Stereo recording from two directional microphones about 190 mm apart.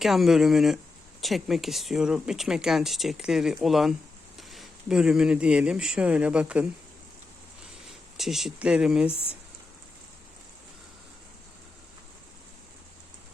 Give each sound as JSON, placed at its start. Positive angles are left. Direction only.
{"t": 0.0, "sound": "speech", "side_deg": 0}
{"t": 8.2, "sound": "speech", "side_deg": 0}